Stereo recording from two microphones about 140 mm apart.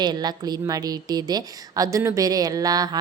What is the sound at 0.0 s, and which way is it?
A woman's voice, 30° right (ahead or behind).